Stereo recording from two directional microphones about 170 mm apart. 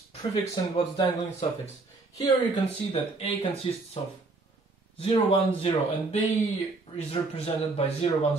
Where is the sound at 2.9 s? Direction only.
30° left (ahead or behind).